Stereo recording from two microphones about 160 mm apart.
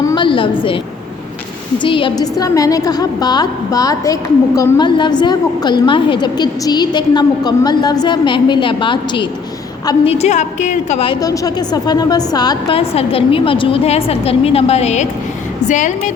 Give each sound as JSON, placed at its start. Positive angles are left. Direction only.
{"t": 0.0, "sound": "a sound", "side_deg": 25}
{"t": 1.8, "sound": "a woman's voice", "side_deg": 30}
{"t": 10.1, "sound": "a woman's voice", "side_deg": 45}
{"t": 11.1, "sound": "a woman's voice", "side_deg": 25}